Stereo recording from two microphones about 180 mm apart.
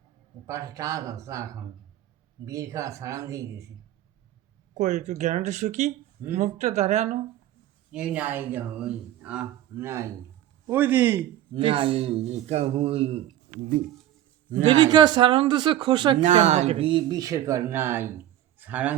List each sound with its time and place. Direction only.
0.4 s speech: 20° right (ahead or behind)
4.7 s speech: 40° right (ahead or behind)
7.9 s speech: 5° right (ahead or behind)
11.5 s speech: 30° right (ahead or behind)
14.7 s speech: 25° right (ahead or behind)
16.2 s speech: 40° right (ahead or behind); by 18.9 s 10° right (ahead or behind)